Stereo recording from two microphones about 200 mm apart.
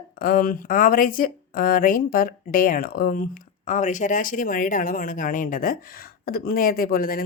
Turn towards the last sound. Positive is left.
turn(degrees=45)  # may be behind; listen again after turning